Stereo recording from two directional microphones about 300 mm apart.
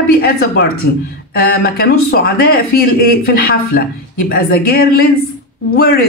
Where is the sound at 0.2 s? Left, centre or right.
Left.